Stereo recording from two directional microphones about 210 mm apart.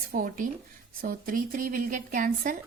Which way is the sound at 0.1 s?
40° right (ahead or behind).